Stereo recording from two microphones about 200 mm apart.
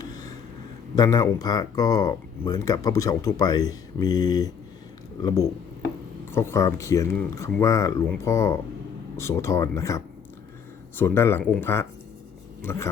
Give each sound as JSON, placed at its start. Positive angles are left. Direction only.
{"t": 0.9, "sound": "speech", "side_deg": 20}